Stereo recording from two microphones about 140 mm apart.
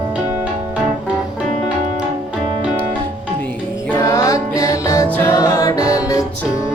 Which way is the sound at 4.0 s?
25° left (ahead or behind).